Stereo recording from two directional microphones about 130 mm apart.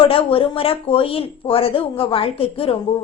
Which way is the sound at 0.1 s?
45° left (ahead or behind).